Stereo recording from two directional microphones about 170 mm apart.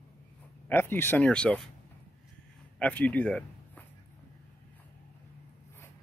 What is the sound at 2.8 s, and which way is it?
Speech, 10° left (ahead or behind).